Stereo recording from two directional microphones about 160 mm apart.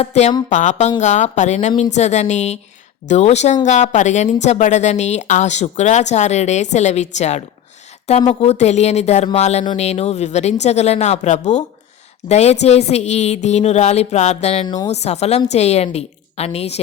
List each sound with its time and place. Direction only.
0.0 s a woman's voice: 45° left (ahead or behind)